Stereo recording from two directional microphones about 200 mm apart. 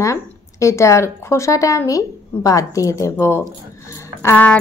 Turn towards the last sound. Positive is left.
turn(degrees=5)  # may be behind; listen again after turning